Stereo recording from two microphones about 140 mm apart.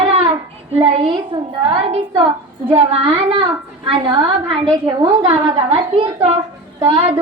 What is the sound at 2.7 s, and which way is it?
A woman's voice, 40° right (ahead or behind).